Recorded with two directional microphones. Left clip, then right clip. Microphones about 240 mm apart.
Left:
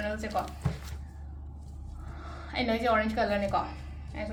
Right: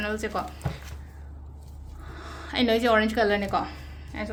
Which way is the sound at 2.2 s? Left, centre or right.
Right.